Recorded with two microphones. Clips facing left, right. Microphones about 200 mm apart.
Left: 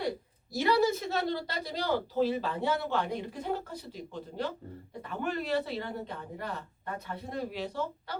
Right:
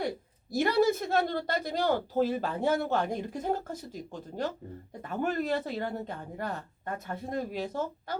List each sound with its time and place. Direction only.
0.5 s speech: 50° right (ahead or behind)